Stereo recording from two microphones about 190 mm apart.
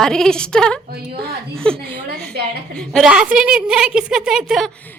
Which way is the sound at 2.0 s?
60° right (ahead or behind).